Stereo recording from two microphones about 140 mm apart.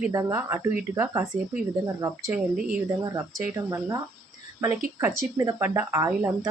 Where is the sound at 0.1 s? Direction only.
20° right (ahead or behind).